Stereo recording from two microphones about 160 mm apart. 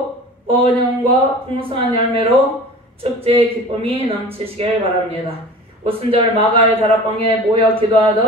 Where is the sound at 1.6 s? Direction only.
35° right (ahead or behind).